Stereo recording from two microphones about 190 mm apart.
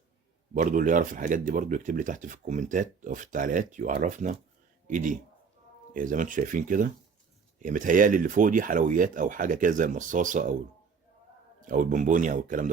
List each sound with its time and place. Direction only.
0.5 s speech: 45° right (ahead or behind)
11.6 s speech: 45° right (ahead or behind)